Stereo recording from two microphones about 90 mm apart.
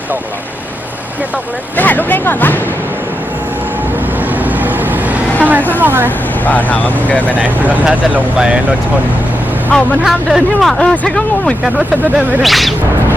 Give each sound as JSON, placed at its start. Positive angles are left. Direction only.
{"t": 1.7, "sound": "speech", "side_deg": 20}
{"t": 4.4, "sound": "vehicle", "side_deg": -20}
{"t": 5.8, "sound": "speech", "side_deg": -25}
{"t": 6.1, "sound": "speech", "side_deg": 20}
{"t": 7.3, "sound": "speech", "side_deg": -15}
{"t": 9.7, "sound": "speech", "side_deg": 10}
{"t": 10.1, "sound": "speech", "side_deg": 0}
{"t": 10.8, "sound": "speech", "side_deg": 15}
{"t": 11.6, "sound": "speech", "side_deg": -5}